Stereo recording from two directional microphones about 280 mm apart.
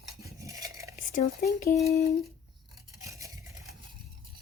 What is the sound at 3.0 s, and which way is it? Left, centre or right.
Vehicle, centre.